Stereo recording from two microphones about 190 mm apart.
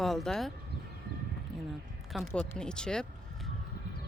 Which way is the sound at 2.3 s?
5° left (ahead or behind).